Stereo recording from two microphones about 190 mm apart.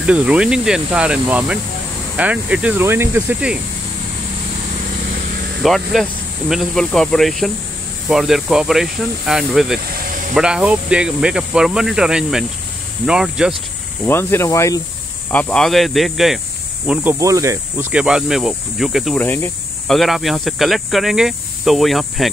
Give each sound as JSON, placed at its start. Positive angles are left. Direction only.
{"t": 0.0, "sound": "speech", "side_deg": -5}
{"t": 5.6, "sound": "speech", "side_deg": 0}
{"t": 9.8, "sound": "snake", "side_deg": -50}
{"t": 10.3, "sound": "speech", "side_deg": -5}
{"t": 14.0, "sound": "speech", "side_deg": 10}
{"t": 19.2, "sound": "speech", "side_deg": 10}